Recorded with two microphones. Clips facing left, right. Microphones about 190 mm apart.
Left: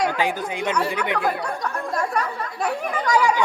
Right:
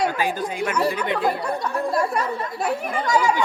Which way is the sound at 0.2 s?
15° left (ahead or behind).